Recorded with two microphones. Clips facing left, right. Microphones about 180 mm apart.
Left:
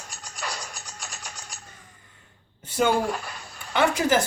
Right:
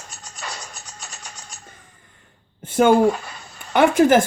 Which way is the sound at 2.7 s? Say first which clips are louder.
Right 8 dB; 55° right (ahead or behind).